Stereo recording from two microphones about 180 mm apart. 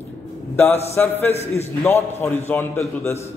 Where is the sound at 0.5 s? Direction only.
10° left (ahead or behind).